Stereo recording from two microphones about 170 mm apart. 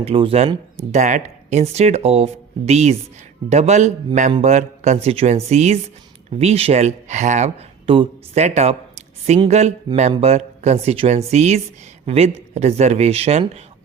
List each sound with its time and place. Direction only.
0.0 s speech: 35° right (ahead or behind)
0.9 s speech: 45° right (ahead or behind)